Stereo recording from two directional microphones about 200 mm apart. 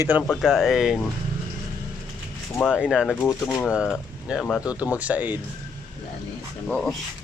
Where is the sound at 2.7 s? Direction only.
5° right (ahead or behind).